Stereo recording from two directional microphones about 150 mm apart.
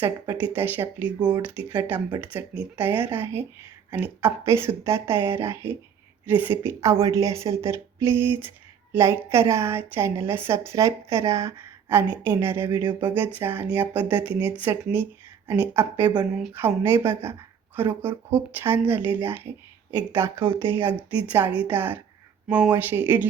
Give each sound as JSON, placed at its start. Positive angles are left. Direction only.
{"t": 0.0, "sound": "a woman's voice", "side_deg": -15}